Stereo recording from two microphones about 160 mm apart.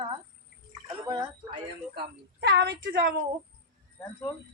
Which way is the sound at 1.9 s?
90° right.